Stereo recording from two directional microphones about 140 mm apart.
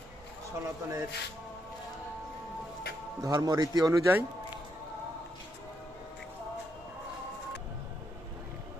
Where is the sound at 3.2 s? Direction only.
25° right (ahead or behind).